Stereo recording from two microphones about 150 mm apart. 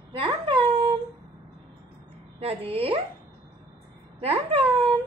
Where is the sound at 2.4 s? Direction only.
40° right (ahead or behind).